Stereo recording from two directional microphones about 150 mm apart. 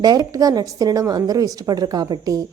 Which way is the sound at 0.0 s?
25° right (ahead or behind).